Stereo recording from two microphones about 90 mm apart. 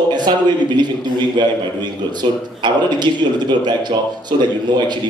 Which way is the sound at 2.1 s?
60° right (ahead or behind).